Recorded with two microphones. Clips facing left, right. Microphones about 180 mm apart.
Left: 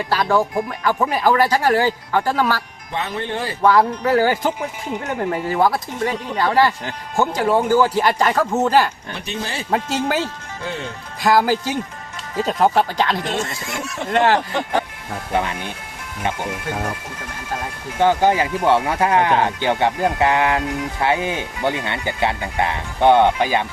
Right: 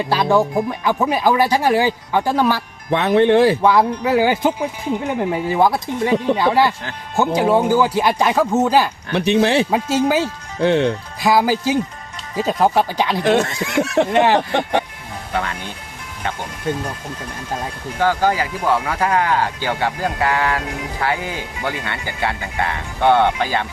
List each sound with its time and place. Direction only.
0.1 s speech: 15° right (ahead or behind)
2.9 s speech: 70° right (ahead or behind)
3.6 s speech: 15° right (ahead or behind)
9.1 s speech: 70° right (ahead or behind)
9.6 s speech: 5° right (ahead or behind)
10.6 s speech: 75° right (ahead or behind)
11.2 s speech: 5° right (ahead or behind)
13.2 s speech: 65° right (ahead or behind)
14.1 s speech: 10° right (ahead or behind)
15.3 s speech: 15° left (ahead or behind)
18.0 s speech: 20° left (ahead or behind)